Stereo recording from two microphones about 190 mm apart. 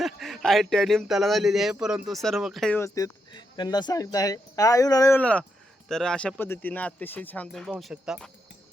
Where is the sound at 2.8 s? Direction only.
20° left (ahead or behind); by 8.3 s centre (ahead or behind).